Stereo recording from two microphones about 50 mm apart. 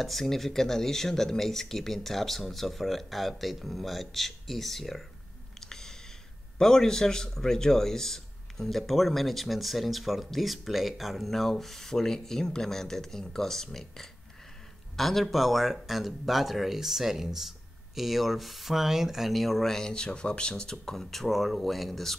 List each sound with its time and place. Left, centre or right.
0.0 s speech: centre
5.6 s a sound: centre
6.6 s a man's voice: centre
19.9 s speech: centre